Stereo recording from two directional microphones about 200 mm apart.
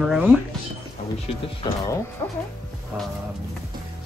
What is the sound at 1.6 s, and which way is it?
Speech, 20° left (ahead or behind).